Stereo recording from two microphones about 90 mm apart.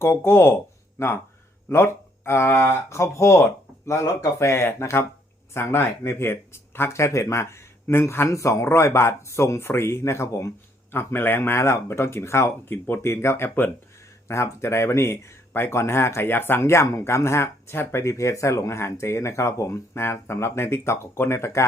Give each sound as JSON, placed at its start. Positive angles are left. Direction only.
{"t": 0.0, "sound": "speech", "side_deg": 30}